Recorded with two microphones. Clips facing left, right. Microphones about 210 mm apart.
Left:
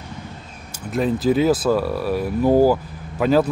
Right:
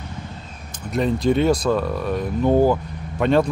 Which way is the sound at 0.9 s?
5° left (ahead or behind).